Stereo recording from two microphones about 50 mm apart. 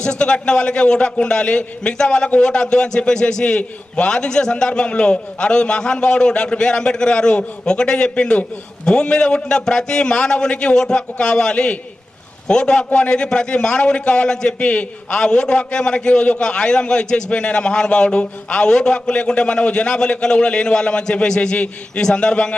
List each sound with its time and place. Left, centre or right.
0.0 s a man's voice: centre